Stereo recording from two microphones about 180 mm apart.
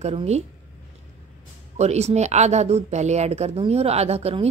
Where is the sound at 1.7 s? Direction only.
35° right (ahead or behind).